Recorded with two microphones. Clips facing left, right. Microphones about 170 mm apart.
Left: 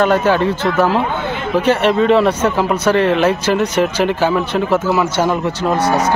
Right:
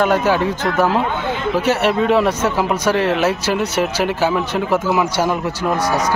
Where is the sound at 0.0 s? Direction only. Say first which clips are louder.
Left 2 dB; 10° right (ahead or behind).